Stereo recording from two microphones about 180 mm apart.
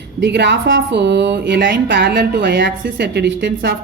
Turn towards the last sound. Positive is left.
turn(degrees=-85)